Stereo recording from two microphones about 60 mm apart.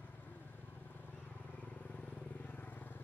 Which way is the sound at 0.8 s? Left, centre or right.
Left.